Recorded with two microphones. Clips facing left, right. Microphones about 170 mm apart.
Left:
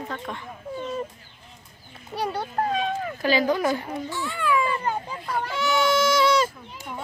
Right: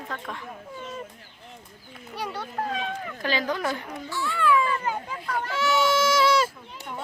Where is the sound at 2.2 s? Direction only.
35° left (ahead or behind).